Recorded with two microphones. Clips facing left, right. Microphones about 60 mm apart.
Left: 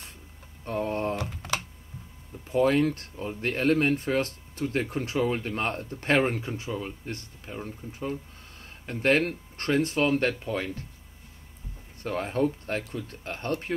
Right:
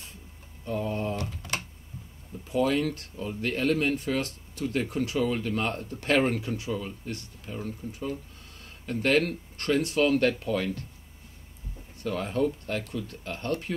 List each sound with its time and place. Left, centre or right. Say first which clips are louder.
0.7 s speech: left 2 dB; left
12.0 s speech: left 1 dB; left